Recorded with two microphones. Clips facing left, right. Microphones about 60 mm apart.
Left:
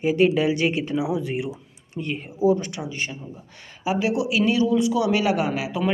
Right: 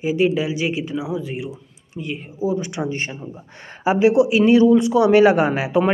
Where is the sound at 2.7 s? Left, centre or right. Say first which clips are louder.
Right 5 dB; right.